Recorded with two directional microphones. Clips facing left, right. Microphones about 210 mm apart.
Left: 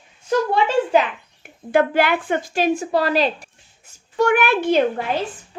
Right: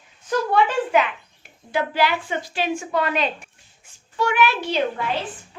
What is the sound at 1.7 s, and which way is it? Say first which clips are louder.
A woman's voice: left 5 dB; 55° left (ahead or behind).